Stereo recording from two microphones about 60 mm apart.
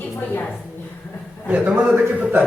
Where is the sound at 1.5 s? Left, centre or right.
Right.